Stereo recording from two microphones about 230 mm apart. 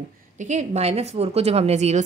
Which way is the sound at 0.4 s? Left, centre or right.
Right.